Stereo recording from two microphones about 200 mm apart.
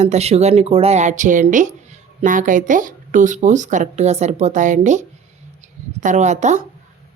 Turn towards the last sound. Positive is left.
turn(degrees=-35)  # may be behind; listen again after turning